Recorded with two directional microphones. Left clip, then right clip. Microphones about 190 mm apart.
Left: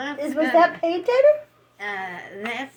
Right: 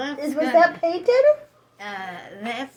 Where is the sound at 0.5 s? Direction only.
10° right (ahead or behind).